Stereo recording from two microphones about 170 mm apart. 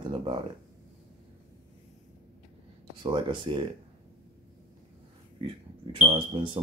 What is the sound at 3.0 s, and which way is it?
Speech, 30° right (ahead or behind).